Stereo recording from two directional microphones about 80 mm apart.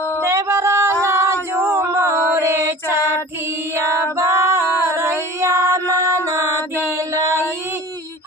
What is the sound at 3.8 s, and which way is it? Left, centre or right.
Female singing, right.